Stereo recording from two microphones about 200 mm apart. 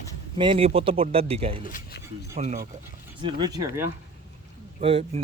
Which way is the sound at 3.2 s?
20° right (ahead or behind).